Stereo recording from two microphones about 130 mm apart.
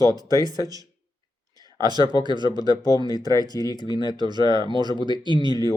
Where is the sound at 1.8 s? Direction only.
30° right (ahead or behind).